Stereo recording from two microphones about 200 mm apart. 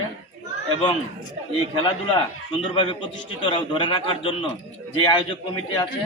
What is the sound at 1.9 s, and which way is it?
A man's voice, 25° left (ahead or behind).